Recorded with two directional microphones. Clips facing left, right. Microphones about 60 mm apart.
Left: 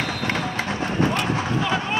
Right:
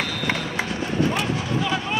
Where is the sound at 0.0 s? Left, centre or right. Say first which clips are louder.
Left 1 dB; left.